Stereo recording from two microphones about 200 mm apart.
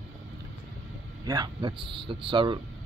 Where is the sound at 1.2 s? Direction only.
20° right (ahead or behind).